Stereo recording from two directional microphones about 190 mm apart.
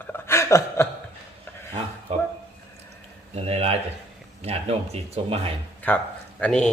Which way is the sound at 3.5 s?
35° right (ahead or behind).